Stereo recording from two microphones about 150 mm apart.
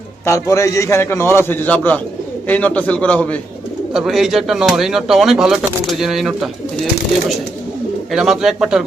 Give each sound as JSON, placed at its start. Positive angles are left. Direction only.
{"t": 0.3, "sound": "a man's voice", "side_deg": 20}
{"t": 8.1, "sound": "speech", "side_deg": -5}